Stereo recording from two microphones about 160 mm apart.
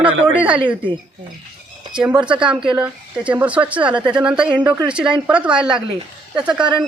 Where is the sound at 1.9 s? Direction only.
5° right (ahead or behind).